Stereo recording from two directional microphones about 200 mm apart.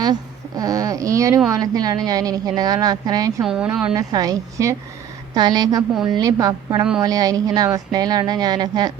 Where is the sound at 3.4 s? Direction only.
5° right (ahead or behind).